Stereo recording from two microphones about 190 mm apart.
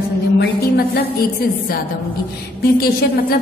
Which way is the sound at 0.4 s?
55° left (ahead or behind).